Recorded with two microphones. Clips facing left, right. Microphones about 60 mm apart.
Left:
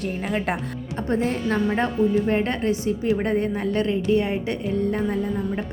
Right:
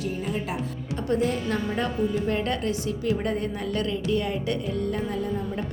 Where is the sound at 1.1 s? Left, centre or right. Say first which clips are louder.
Left 1 dB; left.